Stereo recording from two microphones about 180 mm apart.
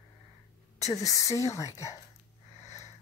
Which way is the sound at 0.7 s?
20° left (ahead or behind).